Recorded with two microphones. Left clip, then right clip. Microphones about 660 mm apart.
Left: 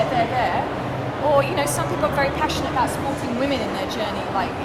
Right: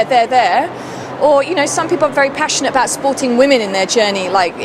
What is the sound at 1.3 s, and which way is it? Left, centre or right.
Speech, right.